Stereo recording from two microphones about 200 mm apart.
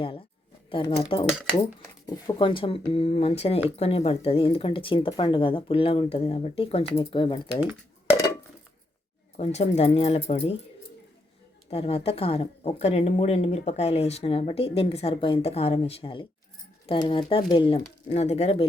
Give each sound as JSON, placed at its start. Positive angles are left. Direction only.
{"t": 0.7, "sound": "speech", "side_deg": 25}
{"t": 9.4, "sound": "speech", "side_deg": 35}
{"t": 11.7, "sound": "speech", "side_deg": 30}